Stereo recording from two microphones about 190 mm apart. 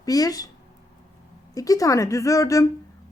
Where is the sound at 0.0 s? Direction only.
20° left (ahead or behind).